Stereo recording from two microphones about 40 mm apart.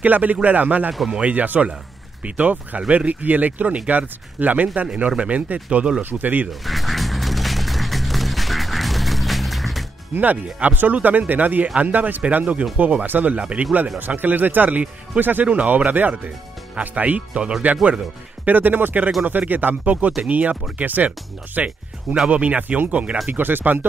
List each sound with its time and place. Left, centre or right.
0.0 s speech: right
4.8 s speech: right
6.0 s speech: right
6.6 s music: centre
10.1 s speech: right
13.9 s speech: right
15.4 s speech: right
15.9 s speech: right
16.9 s speech: right
17.4 s speech: right
18.4 s speech: right
19.7 s speech: right
21.6 s speech: right
23.2 s speech: right